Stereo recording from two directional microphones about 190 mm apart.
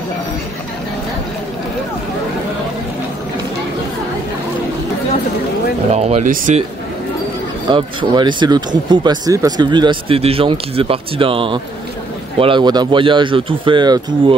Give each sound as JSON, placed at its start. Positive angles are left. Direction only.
{"t": 5.9, "sound": "speech", "side_deg": -35}
{"t": 7.7, "sound": "speech", "side_deg": -25}